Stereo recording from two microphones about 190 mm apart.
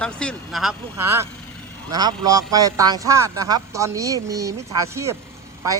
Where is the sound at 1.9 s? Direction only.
20° right (ahead or behind).